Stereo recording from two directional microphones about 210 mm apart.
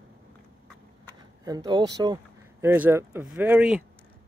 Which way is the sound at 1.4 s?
15° right (ahead or behind).